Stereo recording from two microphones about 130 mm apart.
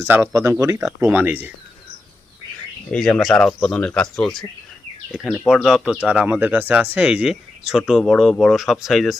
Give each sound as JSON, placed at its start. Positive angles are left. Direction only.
{"t": 0.0, "sound": "speech", "side_deg": -20}
{"t": 0.8, "sound": "speech", "side_deg": -10}
{"t": 2.9, "sound": "speech", "side_deg": 5}
{"t": 5.5, "sound": "speech", "side_deg": 0}